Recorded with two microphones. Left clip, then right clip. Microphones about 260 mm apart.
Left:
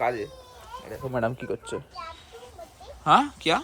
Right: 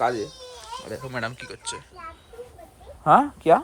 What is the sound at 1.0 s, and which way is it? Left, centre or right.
Speech, centre.